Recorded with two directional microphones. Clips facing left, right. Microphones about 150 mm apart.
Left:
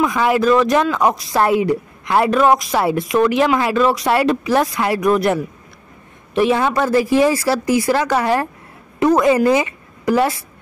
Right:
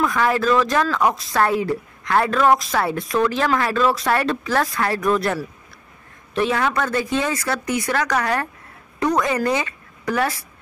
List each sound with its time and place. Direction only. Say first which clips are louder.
0.0 s speech: left 4 dB; 20° left (ahead or behind)
6.5 s a woman's voice: left 6 dB; 25° left (ahead or behind)